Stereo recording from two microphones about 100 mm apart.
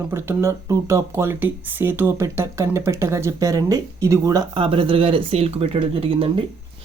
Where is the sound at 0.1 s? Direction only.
25° right (ahead or behind).